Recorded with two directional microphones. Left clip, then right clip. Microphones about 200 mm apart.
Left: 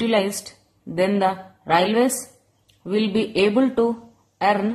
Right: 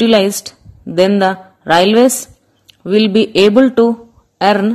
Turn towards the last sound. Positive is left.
turn(degrees=-35)  # may be behind; listen again after turning